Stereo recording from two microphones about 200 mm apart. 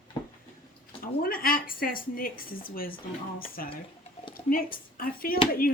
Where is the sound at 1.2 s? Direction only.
45° left (ahead or behind).